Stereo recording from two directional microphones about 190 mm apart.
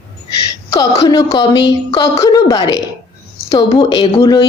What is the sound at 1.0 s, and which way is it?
Speech, 20° left (ahead or behind).